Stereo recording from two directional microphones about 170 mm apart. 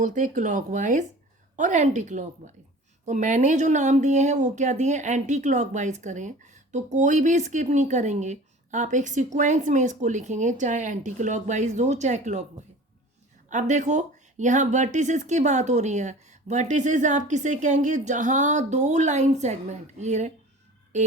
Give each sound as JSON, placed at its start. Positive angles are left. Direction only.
{"t": 0.0, "sound": "speech", "side_deg": -45}
{"t": 13.5, "sound": "speech", "side_deg": -45}